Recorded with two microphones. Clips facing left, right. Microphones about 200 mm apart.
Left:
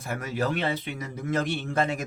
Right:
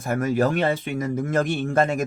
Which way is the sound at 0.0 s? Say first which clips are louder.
Right 8 dB; 45° right (ahead or behind).